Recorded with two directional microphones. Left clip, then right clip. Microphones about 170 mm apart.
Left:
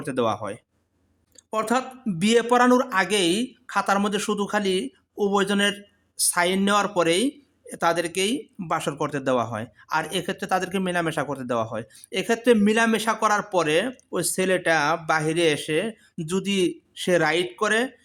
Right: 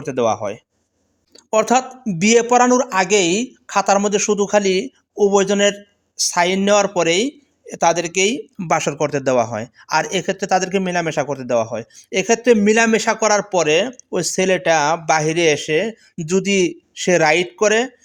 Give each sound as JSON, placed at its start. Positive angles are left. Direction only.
{"t": 0.0, "sound": "speech", "side_deg": -20}
{"t": 1.5, "sound": "speech", "side_deg": -30}
{"t": 8.6, "sound": "speech", "side_deg": -30}